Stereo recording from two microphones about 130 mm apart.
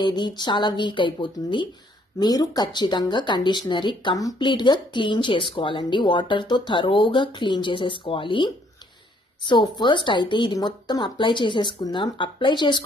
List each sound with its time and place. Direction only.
0.0 s speech: 35° left (ahead or behind)